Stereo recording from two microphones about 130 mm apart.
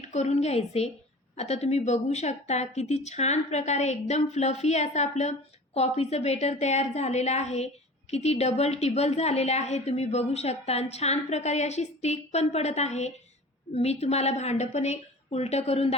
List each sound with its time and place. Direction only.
0.1 s a woman's voice: 60° left (ahead or behind)